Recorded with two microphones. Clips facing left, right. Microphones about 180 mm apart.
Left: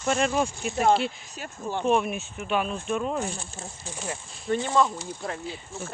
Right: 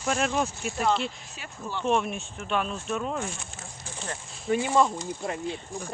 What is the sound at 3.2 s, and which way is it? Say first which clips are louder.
Speech: left 3 dB; 35° left (ahead or behind).